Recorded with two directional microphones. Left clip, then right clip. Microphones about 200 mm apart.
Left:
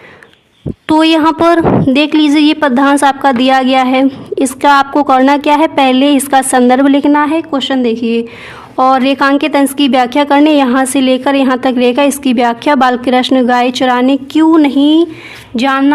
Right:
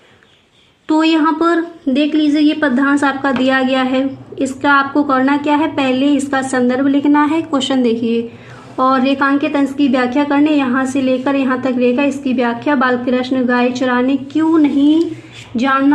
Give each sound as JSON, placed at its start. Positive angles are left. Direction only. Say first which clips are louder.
{"t": 0.9, "sound": "a woman's voice", "louder": "left 5 dB", "side_deg": 40}
{"t": 7.2, "sound": "a woman's voice", "louder": "left 3 dB", "side_deg": 25}
{"t": 8.7, "sound": "a woman's voice", "louder": "left 5 dB", "side_deg": 40}